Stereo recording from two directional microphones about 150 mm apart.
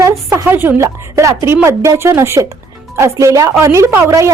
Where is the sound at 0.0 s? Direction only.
20° right (ahead or behind).